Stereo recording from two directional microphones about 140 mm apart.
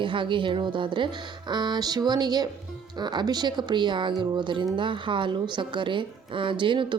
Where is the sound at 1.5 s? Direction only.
30° right (ahead or behind).